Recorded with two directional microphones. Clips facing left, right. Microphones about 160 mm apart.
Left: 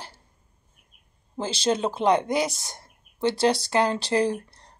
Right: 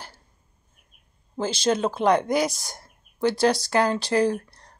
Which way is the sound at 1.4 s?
30° left (ahead or behind).